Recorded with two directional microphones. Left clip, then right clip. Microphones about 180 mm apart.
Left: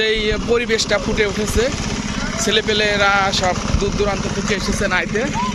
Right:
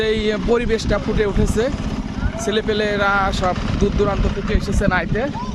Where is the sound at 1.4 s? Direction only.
60° right (ahead or behind).